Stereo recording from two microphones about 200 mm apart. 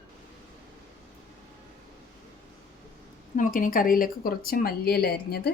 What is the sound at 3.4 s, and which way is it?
Speech, 40° left (ahead or behind).